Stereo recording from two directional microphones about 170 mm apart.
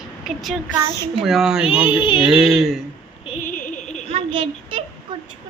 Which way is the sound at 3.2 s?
35° left (ahead or behind).